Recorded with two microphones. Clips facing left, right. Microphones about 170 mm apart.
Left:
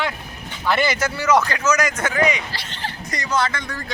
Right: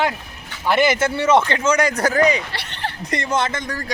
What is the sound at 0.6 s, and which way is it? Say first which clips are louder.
Speech: right 3 dB; 10° right (ahead or behind).